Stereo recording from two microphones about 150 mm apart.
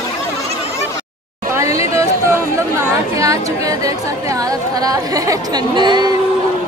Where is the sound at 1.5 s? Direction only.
20° right (ahead or behind).